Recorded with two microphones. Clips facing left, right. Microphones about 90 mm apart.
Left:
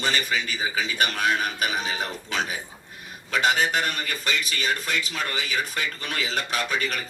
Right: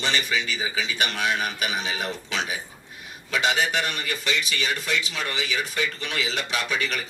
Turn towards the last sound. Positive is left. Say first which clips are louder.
# even
turn(degrees=40)  # may be behind; listen again after turning